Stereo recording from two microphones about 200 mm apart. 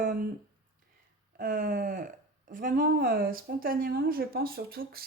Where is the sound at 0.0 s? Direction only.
45° right (ahead or behind).